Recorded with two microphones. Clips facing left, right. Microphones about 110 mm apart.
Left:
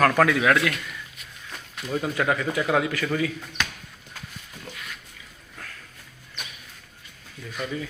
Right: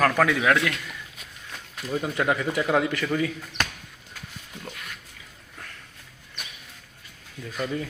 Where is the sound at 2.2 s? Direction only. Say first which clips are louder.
Right 1 dB; 15° right (ahead or behind).